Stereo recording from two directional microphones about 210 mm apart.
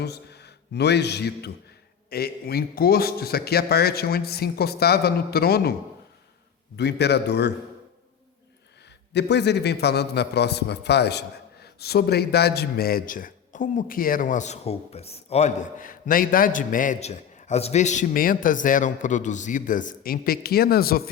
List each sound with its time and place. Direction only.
0.0 s a man's voice: 50° left (ahead or behind)
6.7 s a man's voice: 50° left (ahead or behind)
9.1 s a man's voice: 55° left (ahead or behind)